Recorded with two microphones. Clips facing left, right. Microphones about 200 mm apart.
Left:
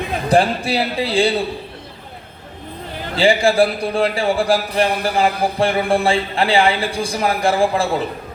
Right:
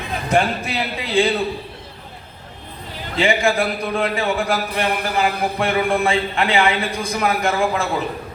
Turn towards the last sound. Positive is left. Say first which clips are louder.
# left 3 dB
turn(degrees=30)  # may be behind; listen again after turning